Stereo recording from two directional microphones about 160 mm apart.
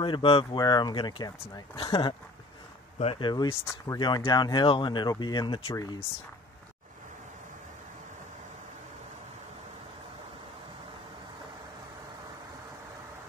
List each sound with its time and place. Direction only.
0.0 s speech: 30° left (ahead or behind)